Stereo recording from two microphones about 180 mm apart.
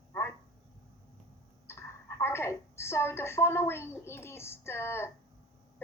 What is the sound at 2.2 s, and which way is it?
A woman's voice, 15° left (ahead or behind).